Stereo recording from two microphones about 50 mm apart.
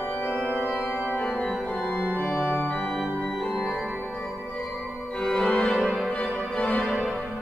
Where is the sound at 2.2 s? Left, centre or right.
Left.